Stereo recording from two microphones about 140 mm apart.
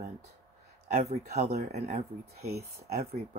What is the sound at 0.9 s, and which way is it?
Speech, 50° right (ahead or behind).